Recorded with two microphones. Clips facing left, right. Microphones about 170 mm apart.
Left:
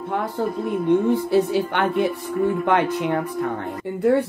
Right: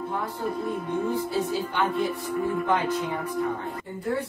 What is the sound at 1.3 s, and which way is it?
Speech, 70° left (ahead or behind).